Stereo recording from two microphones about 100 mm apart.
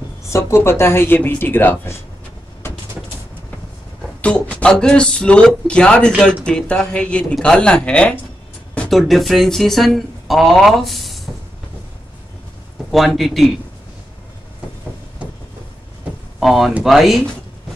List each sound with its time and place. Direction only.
0.3 s speech: 30° left (ahead or behind)
4.2 s speech: 15° left (ahead or behind)
12.9 s speech: centre (ahead or behind)
16.3 s speech: centre (ahead or behind)